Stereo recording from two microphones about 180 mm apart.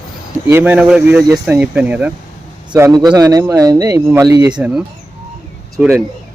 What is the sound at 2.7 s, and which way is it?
Speech, 20° right (ahead or behind).